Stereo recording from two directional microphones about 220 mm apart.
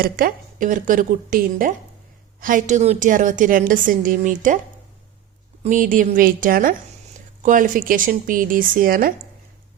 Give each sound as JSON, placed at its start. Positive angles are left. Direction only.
{"t": 0.0, "sound": "a woman's voice", "side_deg": -40}
{"t": 5.6, "sound": "a woman's voice", "side_deg": -35}